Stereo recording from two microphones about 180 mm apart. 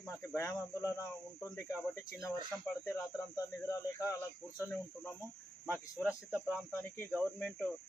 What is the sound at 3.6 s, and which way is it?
Speech, 20° left (ahead or behind).